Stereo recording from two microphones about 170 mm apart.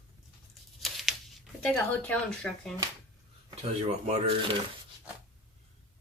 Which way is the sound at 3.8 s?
40° right (ahead or behind).